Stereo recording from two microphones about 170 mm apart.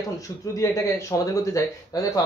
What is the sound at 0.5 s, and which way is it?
Speech, 20° left (ahead or behind).